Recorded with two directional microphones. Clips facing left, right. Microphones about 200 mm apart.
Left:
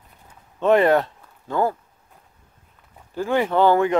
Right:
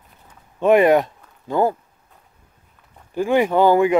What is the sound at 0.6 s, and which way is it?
Speech, 15° right (ahead or behind).